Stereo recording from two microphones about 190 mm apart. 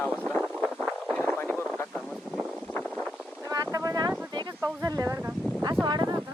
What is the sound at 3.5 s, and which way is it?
Wind noise, 20° right (ahead or behind).